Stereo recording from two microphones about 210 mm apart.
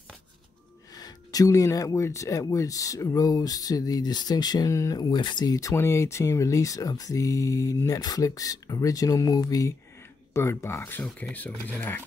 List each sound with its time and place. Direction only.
0.9 s speech: 15° left (ahead or behind)